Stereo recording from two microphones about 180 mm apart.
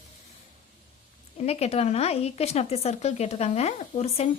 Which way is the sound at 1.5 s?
35° left (ahead or behind).